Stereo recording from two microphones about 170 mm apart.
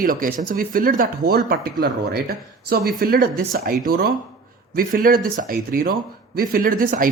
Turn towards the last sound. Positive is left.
turn(degrees=-55)  # may be behind; listen again after turning